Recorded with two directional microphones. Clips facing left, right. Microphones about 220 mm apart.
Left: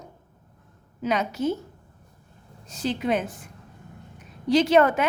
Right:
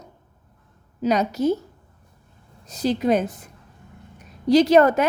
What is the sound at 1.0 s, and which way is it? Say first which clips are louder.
Speech: right 5 dB; 40° right (ahead or behind).